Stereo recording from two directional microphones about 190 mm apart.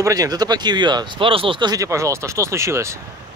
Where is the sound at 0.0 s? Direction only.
20° right (ahead or behind).